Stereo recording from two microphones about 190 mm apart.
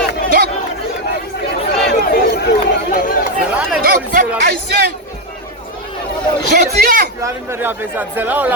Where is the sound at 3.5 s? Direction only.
5° right (ahead or behind).